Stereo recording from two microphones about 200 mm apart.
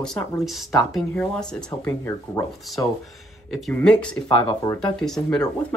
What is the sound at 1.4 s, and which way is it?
Speech, 15° left (ahead or behind).